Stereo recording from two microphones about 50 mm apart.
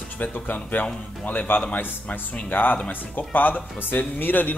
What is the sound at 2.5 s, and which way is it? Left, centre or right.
Speech, left.